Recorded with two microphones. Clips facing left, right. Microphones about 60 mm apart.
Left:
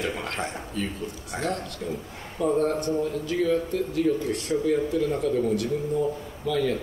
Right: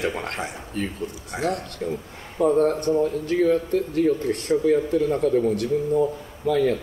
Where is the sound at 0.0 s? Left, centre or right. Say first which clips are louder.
Right 3 dB; right.